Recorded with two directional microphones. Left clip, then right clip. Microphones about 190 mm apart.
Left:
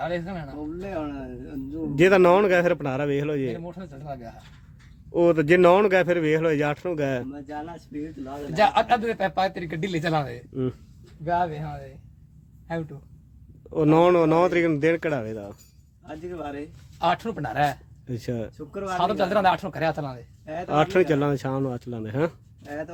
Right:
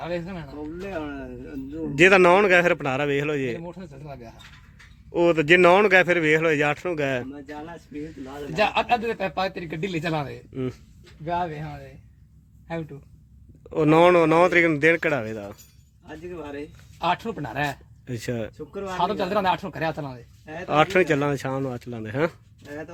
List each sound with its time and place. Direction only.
0.0 s a man's voice: 10° left (ahead or behind)
1.7 s a man's voice: 10° left (ahead or behind)
5.1 s a man's voice: 15° left (ahead or behind)
10.5 s speech: 20° left (ahead or behind)
13.7 s a man's voice: 5° left (ahead or behind)
17.0 s a man's voice: 10° left (ahead or behind)